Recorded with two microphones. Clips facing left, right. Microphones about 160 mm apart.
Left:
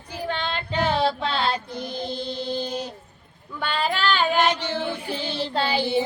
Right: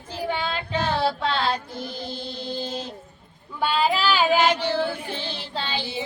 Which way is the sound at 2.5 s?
20° left (ahead or behind).